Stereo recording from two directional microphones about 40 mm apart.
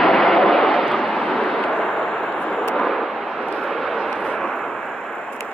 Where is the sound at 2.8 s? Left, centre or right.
Centre.